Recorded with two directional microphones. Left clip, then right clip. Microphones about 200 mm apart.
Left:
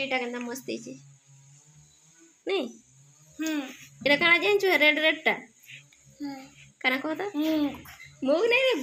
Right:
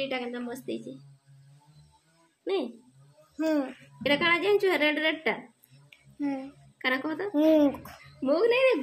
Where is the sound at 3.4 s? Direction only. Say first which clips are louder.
Right 4 dB; 50° right (ahead or behind).